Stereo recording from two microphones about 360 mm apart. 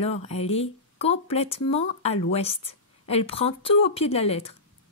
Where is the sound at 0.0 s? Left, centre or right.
Centre.